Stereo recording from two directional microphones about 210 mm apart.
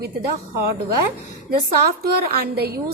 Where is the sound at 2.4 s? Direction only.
50° right (ahead or behind).